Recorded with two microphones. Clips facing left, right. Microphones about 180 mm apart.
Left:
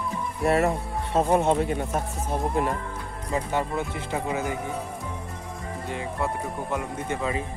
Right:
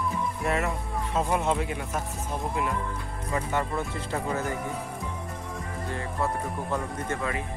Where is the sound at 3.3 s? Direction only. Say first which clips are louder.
Left 2 dB; 20° left (ahead or behind).